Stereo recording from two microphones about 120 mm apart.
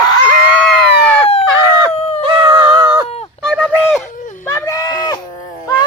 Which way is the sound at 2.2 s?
45° right (ahead or behind).